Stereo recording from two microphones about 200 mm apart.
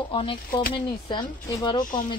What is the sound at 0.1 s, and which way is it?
Speech, 25° left (ahead or behind).